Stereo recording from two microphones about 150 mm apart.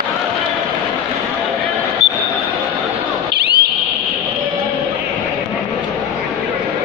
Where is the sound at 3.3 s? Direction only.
90° right.